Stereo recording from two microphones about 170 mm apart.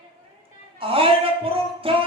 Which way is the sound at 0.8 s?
35° right (ahead or behind).